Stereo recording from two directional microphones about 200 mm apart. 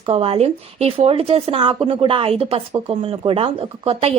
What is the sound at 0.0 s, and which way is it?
Speech, 30° right (ahead or behind).